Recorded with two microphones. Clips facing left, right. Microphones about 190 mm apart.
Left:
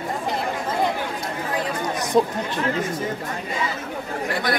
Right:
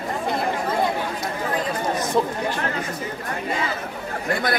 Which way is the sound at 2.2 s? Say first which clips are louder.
Left 4 dB; 20° left (ahead or behind).